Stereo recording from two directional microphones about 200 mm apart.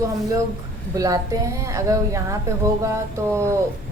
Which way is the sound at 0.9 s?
15° right (ahead or behind).